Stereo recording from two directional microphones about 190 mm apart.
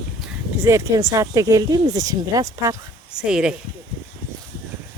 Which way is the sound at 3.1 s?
5° right (ahead or behind).